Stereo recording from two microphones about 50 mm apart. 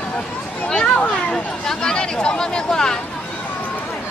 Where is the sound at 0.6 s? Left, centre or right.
Centre.